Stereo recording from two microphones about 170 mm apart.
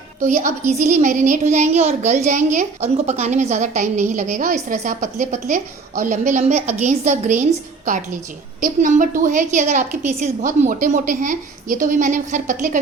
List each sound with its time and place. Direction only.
0.2 s a woman's voice: 50° right (ahead or behind)